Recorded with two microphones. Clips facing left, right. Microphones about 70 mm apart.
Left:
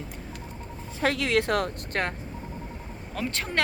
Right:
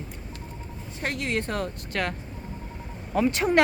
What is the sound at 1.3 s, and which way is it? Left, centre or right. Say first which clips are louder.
Speech: left 4 dB; left.